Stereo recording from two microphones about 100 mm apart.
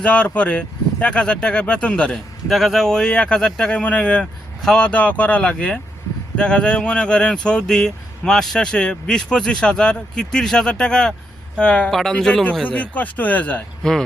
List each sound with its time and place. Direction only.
0.0 s speech: 10° left (ahead or behind)